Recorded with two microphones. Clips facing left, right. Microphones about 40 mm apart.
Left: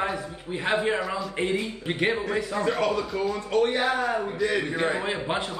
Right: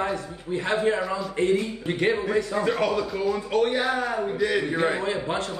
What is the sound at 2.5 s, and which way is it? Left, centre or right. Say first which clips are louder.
A man's voice: right 1 dB; centre.